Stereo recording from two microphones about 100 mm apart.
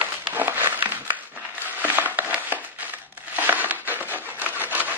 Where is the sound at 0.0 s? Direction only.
20° right (ahead or behind).